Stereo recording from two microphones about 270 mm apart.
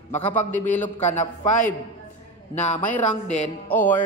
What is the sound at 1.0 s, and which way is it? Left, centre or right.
Speech, left.